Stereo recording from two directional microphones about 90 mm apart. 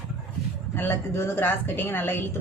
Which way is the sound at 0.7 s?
25° left (ahead or behind).